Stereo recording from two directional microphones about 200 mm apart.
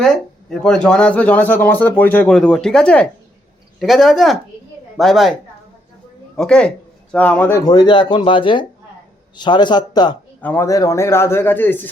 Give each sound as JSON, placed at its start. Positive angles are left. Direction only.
{"t": 0.0, "sound": "speech", "side_deg": 5}
{"t": 6.3, "sound": "speech", "side_deg": 5}
{"t": 10.4, "sound": "speech", "side_deg": 10}